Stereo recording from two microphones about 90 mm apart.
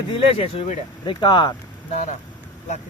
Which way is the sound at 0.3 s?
85° left.